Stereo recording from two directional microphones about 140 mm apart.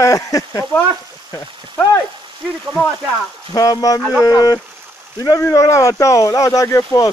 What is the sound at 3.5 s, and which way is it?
Speech, 25° left (ahead or behind).